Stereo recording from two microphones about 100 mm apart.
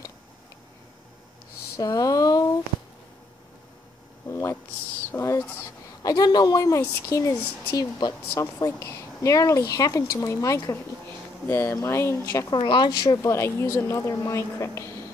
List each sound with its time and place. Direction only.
1.8 s a sound: 35° left (ahead or behind)
4.3 s a sound: 30° left (ahead or behind)
5.1 s speech: 30° left (ahead or behind)
5.4 s a woman's voice: 20° left (ahead or behind)
6.0 s a woman's voice: 40° left (ahead or behind)
12.4 s a woman's voice: 55° left (ahead or behind); by 15.0 s 30° left (ahead or behind)